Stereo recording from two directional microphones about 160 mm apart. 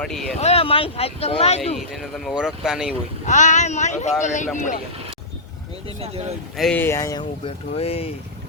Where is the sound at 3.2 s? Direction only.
50° left (ahead or behind).